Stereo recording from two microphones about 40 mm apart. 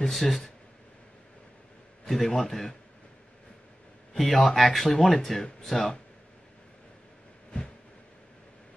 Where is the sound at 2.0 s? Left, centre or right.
Centre.